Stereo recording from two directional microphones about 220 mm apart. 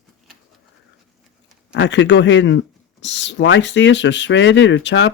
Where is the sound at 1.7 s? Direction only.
55° left (ahead or behind).